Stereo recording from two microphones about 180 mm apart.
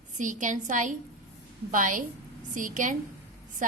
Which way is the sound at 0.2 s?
45° right (ahead or behind).